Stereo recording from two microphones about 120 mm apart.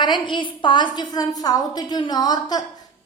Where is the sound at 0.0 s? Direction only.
40° left (ahead or behind).